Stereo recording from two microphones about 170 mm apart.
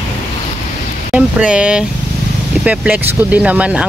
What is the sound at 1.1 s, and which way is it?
Speech, 5° right (ahead or behind).